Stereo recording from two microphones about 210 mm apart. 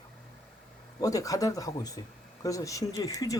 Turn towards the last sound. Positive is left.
turn(degrees=15)  # may be behind; listen again after turning